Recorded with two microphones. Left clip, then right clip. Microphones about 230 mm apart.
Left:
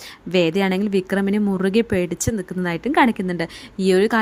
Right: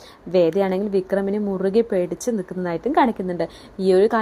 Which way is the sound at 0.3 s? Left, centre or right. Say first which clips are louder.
Right 1 dB; left.